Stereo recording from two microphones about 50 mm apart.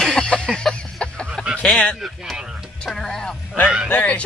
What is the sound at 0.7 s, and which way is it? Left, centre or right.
Chicken, centre.